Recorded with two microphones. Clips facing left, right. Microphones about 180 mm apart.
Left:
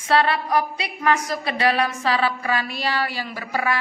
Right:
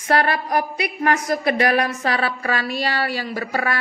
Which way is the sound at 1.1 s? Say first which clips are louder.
Right 1 dB; 60° right (ahead or behind).